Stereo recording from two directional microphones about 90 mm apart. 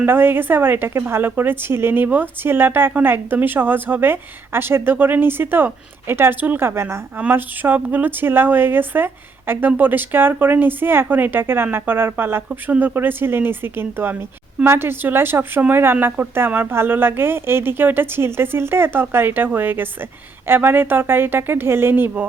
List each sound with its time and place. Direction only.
0.0 s speech: 25° right (ahead or behind)